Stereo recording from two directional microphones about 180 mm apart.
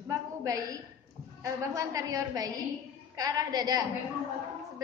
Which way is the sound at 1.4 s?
15° right (ahead or behind).